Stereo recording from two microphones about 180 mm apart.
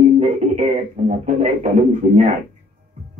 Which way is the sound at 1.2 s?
40° right (ahead or behind).